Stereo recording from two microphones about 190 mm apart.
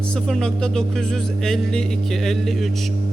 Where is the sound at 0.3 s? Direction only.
5° left (ahead or behind).